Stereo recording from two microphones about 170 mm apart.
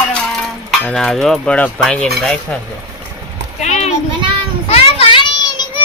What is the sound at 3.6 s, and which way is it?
Children playing, 40° left (ahead or behind).